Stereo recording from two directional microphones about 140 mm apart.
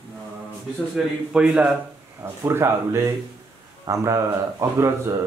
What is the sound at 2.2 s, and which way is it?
Speech, 20° right (ahead or behind).